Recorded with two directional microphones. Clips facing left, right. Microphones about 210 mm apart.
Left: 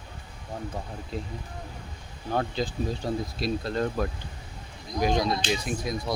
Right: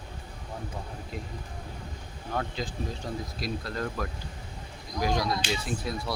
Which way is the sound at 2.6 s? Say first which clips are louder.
Left 5 dB; 30° left (ahead or behind).